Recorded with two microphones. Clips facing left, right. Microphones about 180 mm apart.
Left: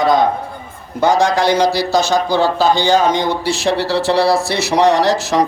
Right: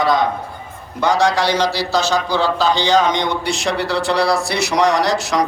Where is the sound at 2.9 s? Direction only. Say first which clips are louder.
Left 2 dB; 5° left (ahead or behind).